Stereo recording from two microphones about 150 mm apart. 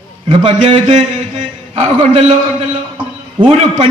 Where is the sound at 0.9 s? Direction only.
50° right (ahead or behind).